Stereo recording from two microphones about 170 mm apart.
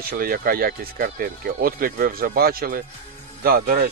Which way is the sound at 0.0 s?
60° right (ahead or behind).